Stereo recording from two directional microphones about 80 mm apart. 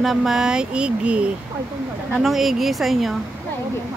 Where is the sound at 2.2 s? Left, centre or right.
Centre.